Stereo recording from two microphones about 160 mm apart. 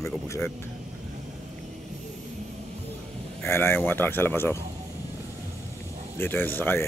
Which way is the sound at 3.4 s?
15° left (ahead or behind).